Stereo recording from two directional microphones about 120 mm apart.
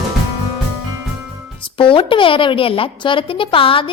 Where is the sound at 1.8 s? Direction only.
45° left (ahead or behind).